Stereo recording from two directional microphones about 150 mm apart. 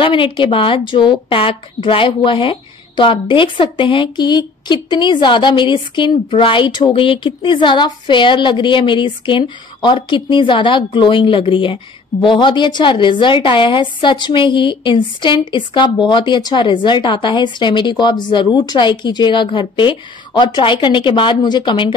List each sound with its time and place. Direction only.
0.0 s a woman's voice: 35° left (ahead or behind)